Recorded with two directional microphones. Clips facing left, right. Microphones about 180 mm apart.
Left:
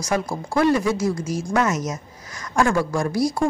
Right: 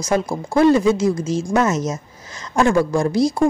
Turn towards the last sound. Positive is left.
turn(degrees=-25)  # may be behind; listen again after turning